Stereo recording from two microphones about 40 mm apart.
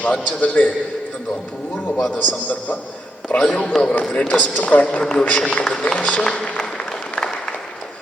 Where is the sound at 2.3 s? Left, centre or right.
Left.